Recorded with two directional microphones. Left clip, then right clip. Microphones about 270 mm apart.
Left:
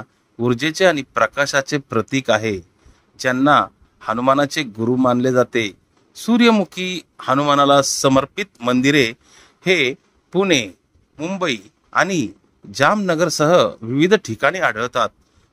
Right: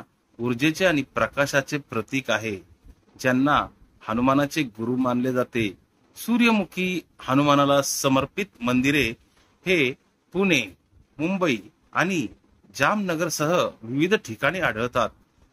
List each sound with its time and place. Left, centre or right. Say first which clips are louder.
0.4 s a man's voice: left 6 dB; centre